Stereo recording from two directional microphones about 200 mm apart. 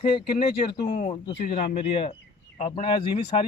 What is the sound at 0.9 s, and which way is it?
Speech, 35° left (ahead or behind).